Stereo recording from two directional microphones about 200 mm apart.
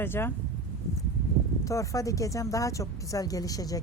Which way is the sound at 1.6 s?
15° left (ahead or behind).